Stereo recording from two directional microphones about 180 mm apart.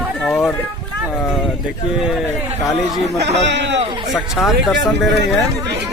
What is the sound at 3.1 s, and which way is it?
Speech, 75° right (ahead or behind).